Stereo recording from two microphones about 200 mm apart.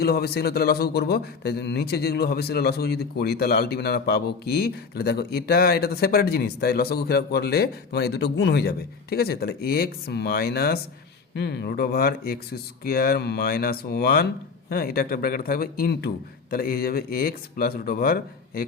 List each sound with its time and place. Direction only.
0.0 s a man's voice: 50° left (ahead or behind)